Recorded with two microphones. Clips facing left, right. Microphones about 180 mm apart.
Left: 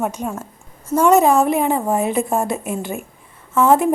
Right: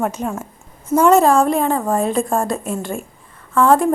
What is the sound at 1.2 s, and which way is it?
A woman's voice, 20° left (ahead or behind).